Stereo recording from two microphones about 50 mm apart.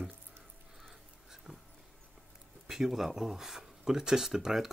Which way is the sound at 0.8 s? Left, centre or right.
Centre.